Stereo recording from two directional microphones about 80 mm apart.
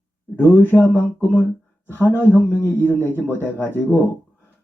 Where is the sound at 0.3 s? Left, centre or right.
Left.